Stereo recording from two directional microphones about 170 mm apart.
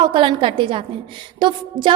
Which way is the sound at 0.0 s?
30° right (ahead or behind).